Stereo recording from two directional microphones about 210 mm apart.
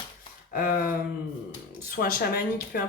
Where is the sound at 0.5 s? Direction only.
45° left (ahead or behind).